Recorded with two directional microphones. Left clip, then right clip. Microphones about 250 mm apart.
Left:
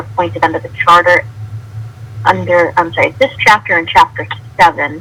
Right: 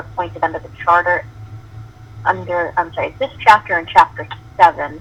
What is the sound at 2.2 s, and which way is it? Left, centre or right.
Speech, left.